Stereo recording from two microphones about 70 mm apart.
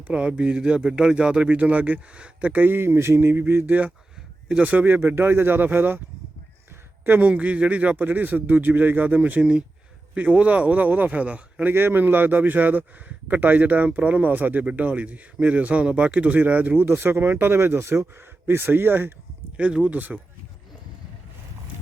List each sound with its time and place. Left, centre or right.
0.1 s speech: centre
7.0 s speech: right
11.7 s speech: right
19.5 s speech: centre